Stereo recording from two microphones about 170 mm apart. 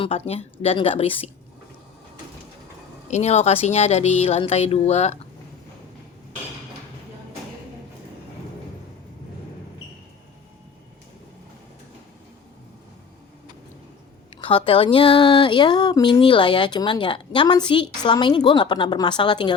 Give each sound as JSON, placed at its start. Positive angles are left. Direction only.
{"t": 0.0, "sound": "speech", "side_deg": 35}
{"t": 3.1, "sound": "speech", "side_deg": 40}
{"t": 14.4, "sound": "a woman's voice", "side_deg": 30}